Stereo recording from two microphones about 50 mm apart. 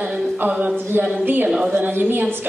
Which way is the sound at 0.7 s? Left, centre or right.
Right.